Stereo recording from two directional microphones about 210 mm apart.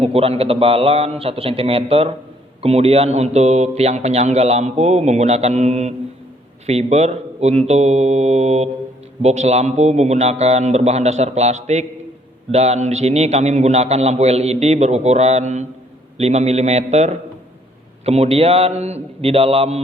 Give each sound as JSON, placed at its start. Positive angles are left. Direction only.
{"t": 0.0, "sound": "a man's voice", "side_deg": -25}